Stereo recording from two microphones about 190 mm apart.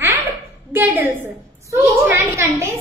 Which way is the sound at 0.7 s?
10° right (ahead or behind).